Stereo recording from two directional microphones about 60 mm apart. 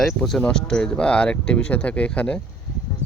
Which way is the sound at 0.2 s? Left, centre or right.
Centre.